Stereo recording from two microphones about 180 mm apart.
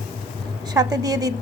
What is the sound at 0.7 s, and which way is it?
Speech, 20° right (ahead or behind).